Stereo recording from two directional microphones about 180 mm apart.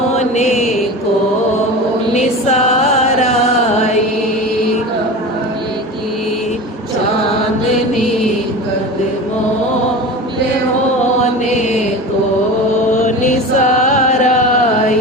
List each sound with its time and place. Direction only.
0.2 s mantra: 40° left (ahead or behind)
2.1 s music: 40° left (ahead or behind)
13.6 s music: 45° left (ahead or behind)